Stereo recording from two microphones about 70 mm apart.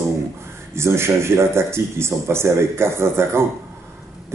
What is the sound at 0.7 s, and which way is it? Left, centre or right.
A man's voice, right.